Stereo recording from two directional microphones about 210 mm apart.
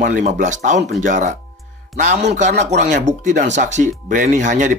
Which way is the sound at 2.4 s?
35° right (ahead or behind).